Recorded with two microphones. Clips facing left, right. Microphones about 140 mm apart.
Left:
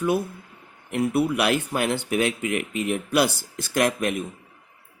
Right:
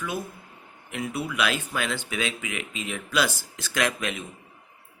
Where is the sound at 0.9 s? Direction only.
55° left (ahead or behind).